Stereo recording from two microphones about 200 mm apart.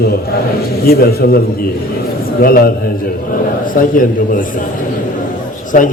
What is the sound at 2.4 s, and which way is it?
Speech, 45° left (ahead or behind).